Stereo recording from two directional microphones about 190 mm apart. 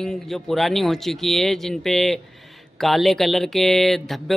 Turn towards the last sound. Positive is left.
turn(degrees=0)  # may be behind; listen again after turning